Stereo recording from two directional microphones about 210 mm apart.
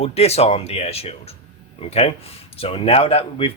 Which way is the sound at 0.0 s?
30° left (ahead or behind).